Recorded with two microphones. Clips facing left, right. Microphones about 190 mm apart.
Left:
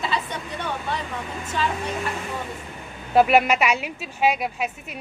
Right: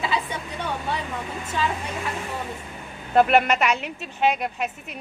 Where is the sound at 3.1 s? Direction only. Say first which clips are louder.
Left 1 dB; 5° left (ahead or behind).